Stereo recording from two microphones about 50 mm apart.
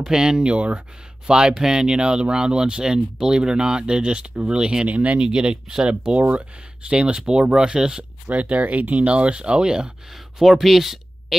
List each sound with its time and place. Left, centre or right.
0.0 s speech: centre
5.2 s speech: centre
6.1 s speech: right
8.3 s speech: right
10.4 s speech: centre